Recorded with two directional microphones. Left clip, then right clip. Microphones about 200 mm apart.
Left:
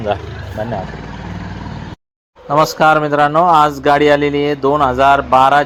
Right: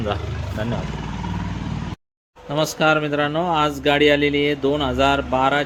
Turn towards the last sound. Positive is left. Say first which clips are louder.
# left 9 dB
turn(degrees=5)  # may be behind; listen again after turning